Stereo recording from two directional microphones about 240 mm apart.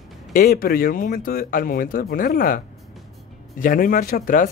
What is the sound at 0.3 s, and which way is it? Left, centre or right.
Speech, left.